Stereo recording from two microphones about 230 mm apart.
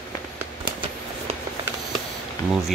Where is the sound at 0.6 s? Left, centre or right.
Right.